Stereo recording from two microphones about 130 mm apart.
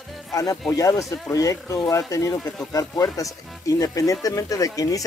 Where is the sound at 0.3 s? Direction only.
25° left (ahead or behind).